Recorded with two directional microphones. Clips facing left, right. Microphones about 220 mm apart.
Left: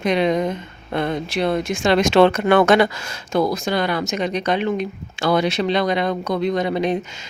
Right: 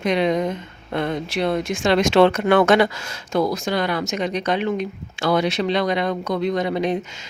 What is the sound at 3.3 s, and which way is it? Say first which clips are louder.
Speech: left 1 dB; 25° left (ahead or behind).